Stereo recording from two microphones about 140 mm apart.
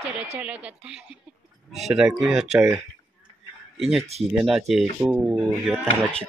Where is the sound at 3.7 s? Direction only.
Centre (ahead or behind).